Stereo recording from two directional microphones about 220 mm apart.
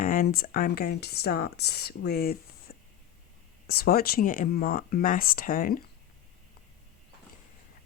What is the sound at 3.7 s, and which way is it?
Speech, 45° left (ahead or behind).